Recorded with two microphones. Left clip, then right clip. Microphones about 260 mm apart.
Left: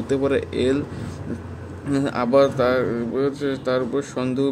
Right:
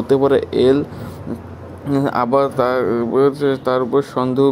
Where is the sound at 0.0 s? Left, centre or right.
Centre.